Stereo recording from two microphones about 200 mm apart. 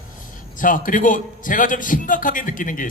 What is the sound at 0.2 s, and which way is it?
A man's voice, 40° left (ahead or behind).